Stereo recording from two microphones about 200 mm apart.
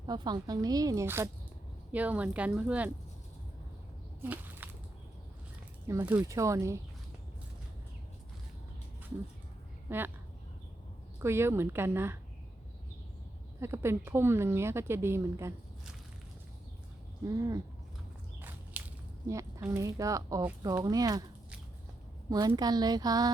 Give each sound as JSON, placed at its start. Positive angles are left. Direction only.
{"t": 0.0, "sound": "speech", "side_deg": -20}
{"t": 4.2, "sound": "a sound", "side_deg": -10}
{"t": 5.9, "sound": "speech", "side_deg": -15}
{"t": 9.9, "sound": "speech", "side_deg": -10}
{"t": 11.2, "sound": "speech", "side_deg": -10}
{"t": 13.6, "sound": "speech", "side_deg": -10}
{"t": 18.8, "sound": "squish", "side_deg": -10}
{"t": 19.3, "sound": "speech", "side_deg": -15}
{"t": 22.3, "sound": "speech", "side_deg": -20}